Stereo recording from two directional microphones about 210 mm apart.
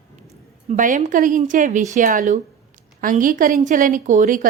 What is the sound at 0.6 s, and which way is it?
A woman's voice, 40° right (ahead or behind).